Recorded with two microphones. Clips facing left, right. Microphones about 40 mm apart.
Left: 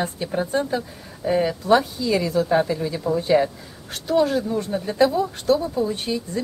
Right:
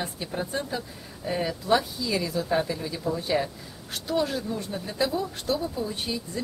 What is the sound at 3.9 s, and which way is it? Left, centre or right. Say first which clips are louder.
A woman's voice: left 7 dB; centre.